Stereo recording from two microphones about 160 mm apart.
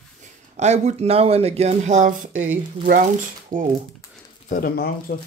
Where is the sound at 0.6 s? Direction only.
45° right (ahead or behind).